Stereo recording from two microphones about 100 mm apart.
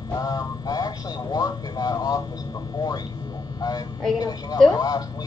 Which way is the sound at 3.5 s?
40° left (ahead or behind).